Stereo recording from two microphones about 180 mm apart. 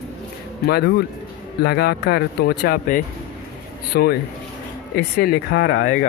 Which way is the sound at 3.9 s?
60° left (ahead or behind).